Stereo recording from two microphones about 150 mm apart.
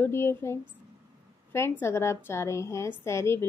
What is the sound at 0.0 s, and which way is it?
A woman's voice, 15° left (ahead or behind).